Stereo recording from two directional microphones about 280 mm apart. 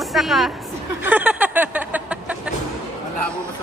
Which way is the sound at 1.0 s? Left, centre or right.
Centre.